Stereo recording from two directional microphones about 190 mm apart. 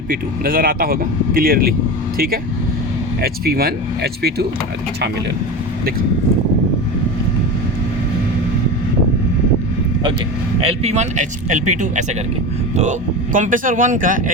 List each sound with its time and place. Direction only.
0.1 s speech: 50° right (ahead or behind)
10.6 s speech: 35° right (ahead or behind)